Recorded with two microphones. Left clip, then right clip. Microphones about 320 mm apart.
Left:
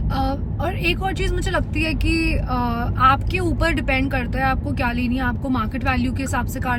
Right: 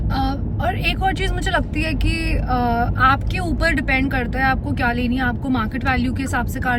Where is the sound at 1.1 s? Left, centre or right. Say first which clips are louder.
Right 3 dB; centre.